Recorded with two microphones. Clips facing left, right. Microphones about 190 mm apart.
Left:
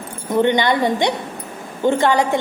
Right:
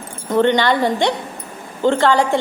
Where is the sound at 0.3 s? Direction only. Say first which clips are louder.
Right 1 dB; 15° left (ahead or behind).